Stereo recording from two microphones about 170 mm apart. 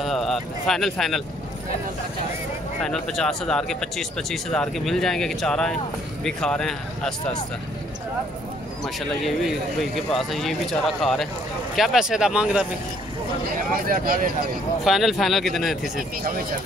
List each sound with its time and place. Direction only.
0.0 s speech: centre (ahead or behind)
2.8 s speech: 5° left (ahead or behind)
8.8 s speech: centre (ahead or behind)
13.8 s speech: 55° right (ahead or behind)
14.9 s speech: centre (ahead or behind)